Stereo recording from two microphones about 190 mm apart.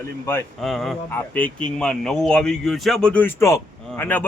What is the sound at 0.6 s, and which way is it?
A man's voice, centre (ahead or behind).